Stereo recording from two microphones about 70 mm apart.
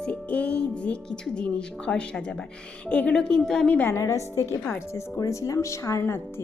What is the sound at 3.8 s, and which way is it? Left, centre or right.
A woman's voice, left.